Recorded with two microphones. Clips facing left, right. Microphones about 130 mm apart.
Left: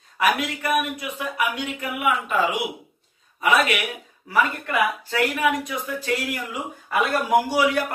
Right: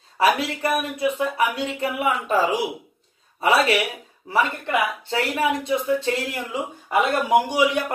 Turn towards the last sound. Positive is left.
turn(degrees=-20)  # may be behind; listen again after turning